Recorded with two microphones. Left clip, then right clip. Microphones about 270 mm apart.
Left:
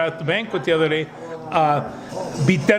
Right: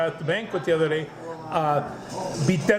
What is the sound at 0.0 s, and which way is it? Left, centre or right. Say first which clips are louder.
A man's voice: left 4 dB; left.